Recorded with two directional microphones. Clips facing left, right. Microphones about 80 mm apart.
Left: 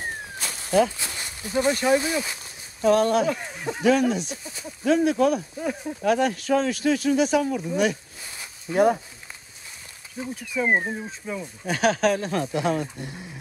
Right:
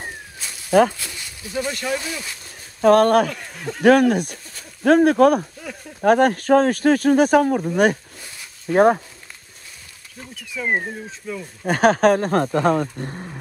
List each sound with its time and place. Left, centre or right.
0.7 s speech: right
1.6 s speech: left
2.8 s speech: right
3.4 s speech: centre
3.8 s speech: right
5.6 s speech: left
6.0 s speech: right
10.2 s speech: centre
10.6 s speech: left
11.6 s speech: right